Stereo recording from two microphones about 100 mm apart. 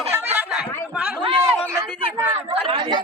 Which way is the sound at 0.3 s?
10° right (ahead or behind).